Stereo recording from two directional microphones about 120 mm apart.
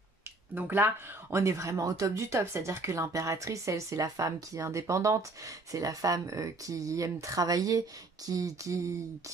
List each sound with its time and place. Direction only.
0.6 s speech: 15° right (ahead or behind)